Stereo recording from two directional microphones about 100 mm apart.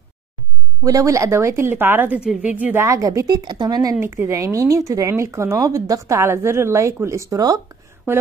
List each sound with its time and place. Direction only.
0.8 s a woman's voice: 35° right (ahead or behind); by 2.8 s 15° right (ahead or behind)
2.8 s speech: 30° right (ahead or behind)
4.0 s speech: 30° right (ahead or behind)